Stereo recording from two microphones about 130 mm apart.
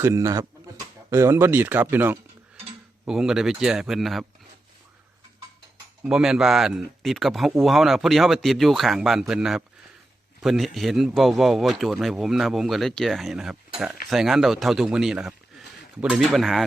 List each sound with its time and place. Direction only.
0.0 s speech: 25° right (ahead or behind)
3.1 s speech: 5° right (ahead or behind)
6.0 s speech: 5° right (ahead or behind)